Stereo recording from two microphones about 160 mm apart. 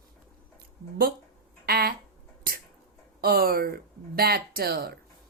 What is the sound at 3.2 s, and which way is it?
Speech, 70° right (ahead or behind).